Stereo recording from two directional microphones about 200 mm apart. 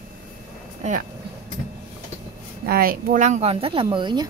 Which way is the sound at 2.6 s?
45° right (ahead or behind).